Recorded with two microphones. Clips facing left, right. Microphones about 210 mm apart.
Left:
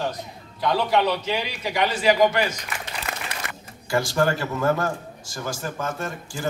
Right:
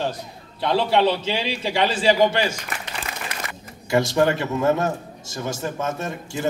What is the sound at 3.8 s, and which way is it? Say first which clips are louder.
A man's voice: right 3 dB; 20° right (ahead or behind).